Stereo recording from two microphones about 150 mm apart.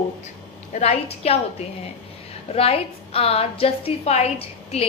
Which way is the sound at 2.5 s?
40° left (ahead or behind).